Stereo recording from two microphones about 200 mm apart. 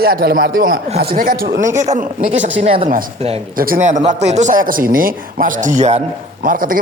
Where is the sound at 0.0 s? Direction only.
50° right (ahead or behind); by 3.4 s 30° right (ahead or behind).